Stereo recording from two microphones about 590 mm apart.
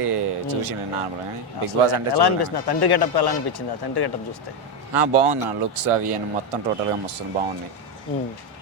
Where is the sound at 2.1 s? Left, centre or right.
Left.